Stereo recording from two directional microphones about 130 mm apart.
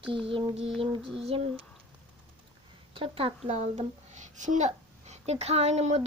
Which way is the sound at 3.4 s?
65° right (ahead or behind).